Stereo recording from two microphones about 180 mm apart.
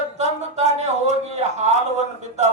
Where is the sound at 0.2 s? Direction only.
40° right (ahead or behind).